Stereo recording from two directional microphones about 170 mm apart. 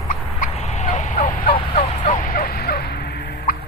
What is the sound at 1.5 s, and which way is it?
Fowl, 30° left (ahead or behind).